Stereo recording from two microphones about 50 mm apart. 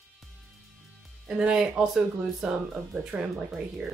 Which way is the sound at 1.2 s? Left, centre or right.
Centre.